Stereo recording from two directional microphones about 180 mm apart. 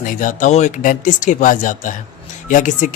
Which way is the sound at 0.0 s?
45° left (ahead or behind).